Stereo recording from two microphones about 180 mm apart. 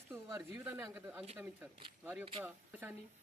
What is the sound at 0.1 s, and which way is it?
Speech, 15° right (ahead or behind).